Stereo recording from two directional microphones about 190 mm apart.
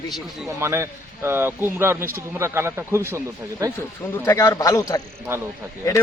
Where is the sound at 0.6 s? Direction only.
15° right (ahead or behind).